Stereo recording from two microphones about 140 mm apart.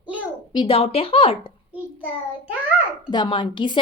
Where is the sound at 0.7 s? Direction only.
45° left (ahead or behind).